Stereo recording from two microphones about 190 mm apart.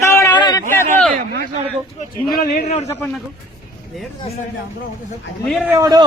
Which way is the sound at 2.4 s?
40° left (ahead or behind).